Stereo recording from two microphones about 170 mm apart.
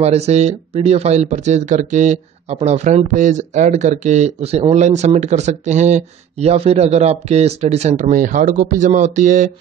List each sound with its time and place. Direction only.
0.0 s speech: 40° right (ahead or behind)